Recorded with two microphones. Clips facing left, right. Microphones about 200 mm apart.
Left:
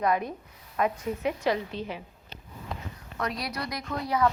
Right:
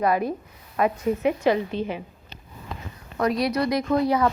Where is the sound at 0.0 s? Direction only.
5° right (ahead or behind).